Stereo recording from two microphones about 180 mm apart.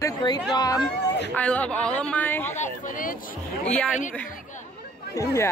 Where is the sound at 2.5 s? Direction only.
50° left (ahead or behind).